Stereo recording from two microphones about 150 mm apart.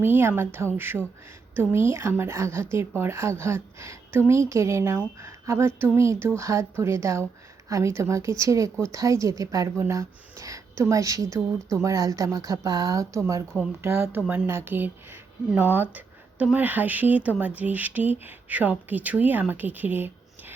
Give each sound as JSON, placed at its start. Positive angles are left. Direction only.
{"t": 0.0, "sound": "a woman's voice", "side_deg": -15}